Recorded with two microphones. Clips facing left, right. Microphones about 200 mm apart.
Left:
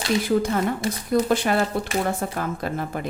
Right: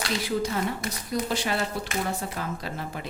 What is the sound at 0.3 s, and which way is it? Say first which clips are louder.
Speech: left 4 dB; 50° left (ahead or behind).